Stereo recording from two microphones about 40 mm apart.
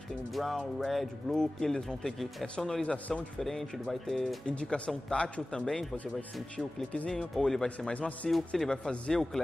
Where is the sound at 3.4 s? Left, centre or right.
Centre.